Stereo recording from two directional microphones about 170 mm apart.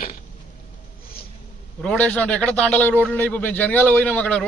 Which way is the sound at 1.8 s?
10° left (ahead or behind).